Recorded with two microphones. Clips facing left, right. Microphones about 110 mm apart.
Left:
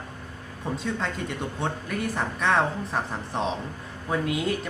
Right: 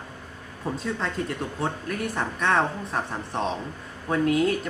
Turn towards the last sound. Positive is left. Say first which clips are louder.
# right 4 dB
turn(degrees=5)  # may be behind; listen again after turning